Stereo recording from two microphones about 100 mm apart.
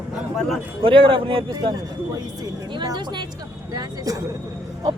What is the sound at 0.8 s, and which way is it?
Speech, 60° right (ahead or behind).